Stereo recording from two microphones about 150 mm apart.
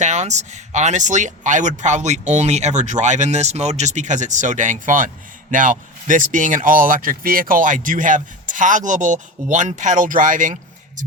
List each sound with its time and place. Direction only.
0.0 s speech: 50° right (ahead or behind)